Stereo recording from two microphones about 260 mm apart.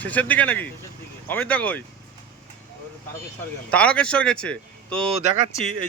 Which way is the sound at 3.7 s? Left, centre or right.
Centre.